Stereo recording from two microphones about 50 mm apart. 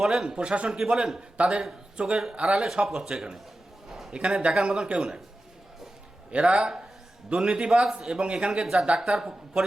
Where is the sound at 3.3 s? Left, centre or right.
Centre.